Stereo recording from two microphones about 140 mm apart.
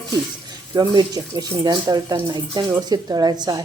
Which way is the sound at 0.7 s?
30° right (ahead or behind).